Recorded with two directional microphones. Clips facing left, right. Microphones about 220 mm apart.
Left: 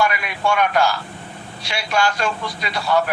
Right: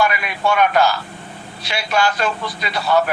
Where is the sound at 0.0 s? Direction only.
5° right (ahead or behind).